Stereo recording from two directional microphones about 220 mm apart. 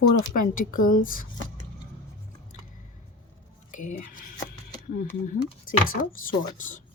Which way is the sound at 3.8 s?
40° left (ahead or behind).